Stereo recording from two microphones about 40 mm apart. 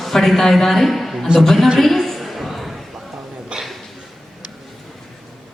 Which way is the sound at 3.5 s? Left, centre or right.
Right.